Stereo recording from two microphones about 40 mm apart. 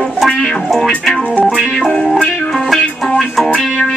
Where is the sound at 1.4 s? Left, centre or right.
Left.